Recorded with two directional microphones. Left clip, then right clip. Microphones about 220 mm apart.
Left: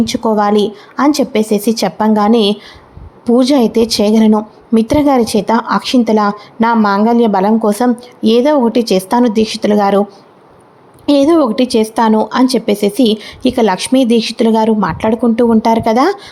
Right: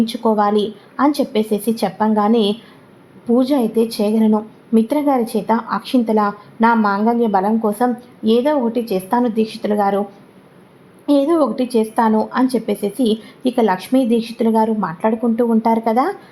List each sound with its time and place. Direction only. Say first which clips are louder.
0.0 s a woman's voice: left 4 dB; 25° left (ahead or behind)
11.0 s a woman's voice: left 5 dB; 25° left (ahead or behind)